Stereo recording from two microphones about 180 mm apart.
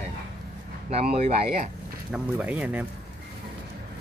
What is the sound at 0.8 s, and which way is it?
Speech, 35° right (ahead or behind).